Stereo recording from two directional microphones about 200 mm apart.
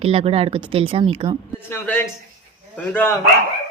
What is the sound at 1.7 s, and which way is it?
Speech, 10° left (ahead or behind).